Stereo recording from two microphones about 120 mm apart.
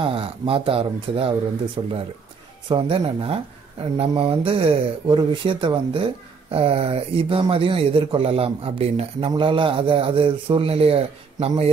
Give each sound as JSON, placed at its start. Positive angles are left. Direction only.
{"t": 0.0, "sound": "speech", "side_deg": -50}
{"t": 9.4, "sound": "speech", "side_deg": -45}